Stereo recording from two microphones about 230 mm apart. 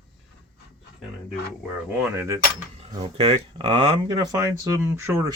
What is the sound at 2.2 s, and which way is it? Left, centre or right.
Speech, centre.